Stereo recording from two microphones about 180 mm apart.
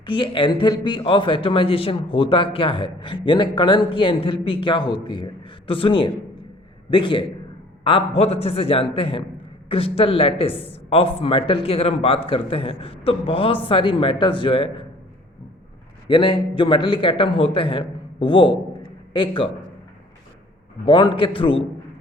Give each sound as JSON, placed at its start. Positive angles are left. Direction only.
{"t": 0.0, "sound": "a man's voice", "side_deg": 25}
{"t": 16.0, "sound": "a man's voice", "side_deg": 25}
{"t": 20.8, "sound": "a man's voice", "side_deg": 25}